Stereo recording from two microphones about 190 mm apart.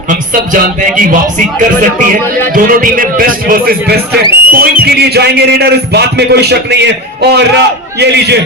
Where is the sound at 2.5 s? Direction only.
45° right (ahead or behind).